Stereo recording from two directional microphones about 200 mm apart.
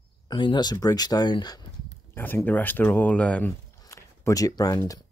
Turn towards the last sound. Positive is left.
turn(degrees=20)  # may be behind; listen again after turning